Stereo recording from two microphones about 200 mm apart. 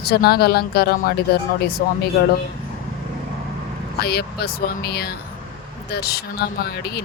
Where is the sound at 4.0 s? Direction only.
55° left (ahead or behind).